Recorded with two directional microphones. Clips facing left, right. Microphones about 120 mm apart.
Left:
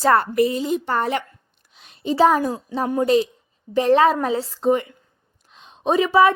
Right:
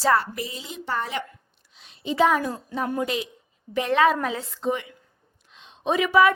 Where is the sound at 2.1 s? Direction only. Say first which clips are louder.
Left 4 dB; 35° left (ahead or behind).